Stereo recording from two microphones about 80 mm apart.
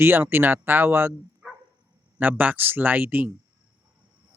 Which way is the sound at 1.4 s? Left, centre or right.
Centre.